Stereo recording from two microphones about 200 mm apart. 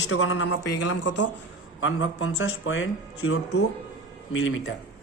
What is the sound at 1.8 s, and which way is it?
A man's voice, 80° left.